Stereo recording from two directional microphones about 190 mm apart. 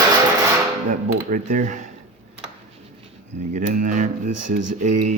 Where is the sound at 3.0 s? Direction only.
40° right (ahead or behind).